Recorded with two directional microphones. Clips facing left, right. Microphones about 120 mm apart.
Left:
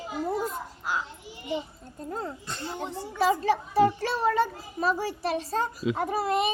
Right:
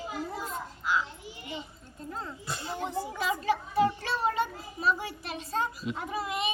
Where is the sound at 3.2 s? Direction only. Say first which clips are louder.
Left 7 dB; 40° left (ahead or behind).